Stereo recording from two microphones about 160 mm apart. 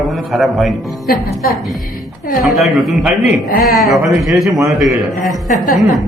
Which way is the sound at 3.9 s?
20° right (ahead or behind).